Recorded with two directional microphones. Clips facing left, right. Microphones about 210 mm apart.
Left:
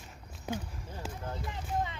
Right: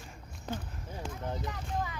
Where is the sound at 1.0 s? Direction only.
5° left (ahead or behind).